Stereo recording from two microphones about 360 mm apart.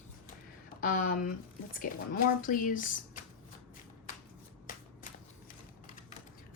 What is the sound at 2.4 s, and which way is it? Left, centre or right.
Speech, left.